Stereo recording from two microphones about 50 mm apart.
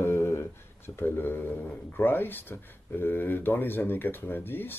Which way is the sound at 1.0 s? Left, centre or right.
Left.